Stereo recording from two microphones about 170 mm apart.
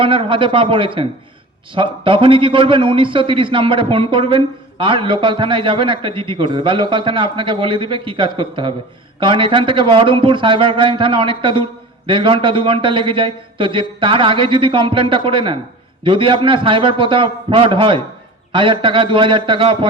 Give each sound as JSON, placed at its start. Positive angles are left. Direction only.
{"t": 0.0, "sound": "a man's voice", "side_deg": -30}